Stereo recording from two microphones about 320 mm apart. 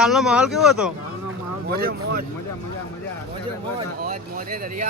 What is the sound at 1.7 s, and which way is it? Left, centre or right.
Speech, right.